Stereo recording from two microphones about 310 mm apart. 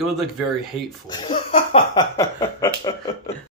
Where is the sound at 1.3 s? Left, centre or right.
Centre.